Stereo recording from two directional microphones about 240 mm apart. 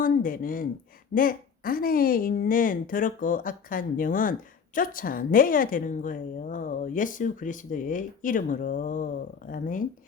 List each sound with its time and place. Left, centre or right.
0.0 s speech: left